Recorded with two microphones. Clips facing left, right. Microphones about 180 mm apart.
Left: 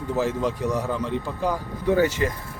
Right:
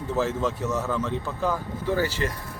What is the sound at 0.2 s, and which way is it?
A man's voice, 15° left (ahead or behind).